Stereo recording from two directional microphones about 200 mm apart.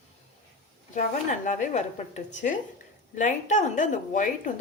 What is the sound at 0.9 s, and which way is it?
Speech, 40° left (ahead or behind).